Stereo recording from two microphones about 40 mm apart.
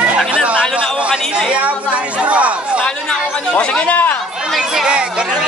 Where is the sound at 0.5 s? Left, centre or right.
Right.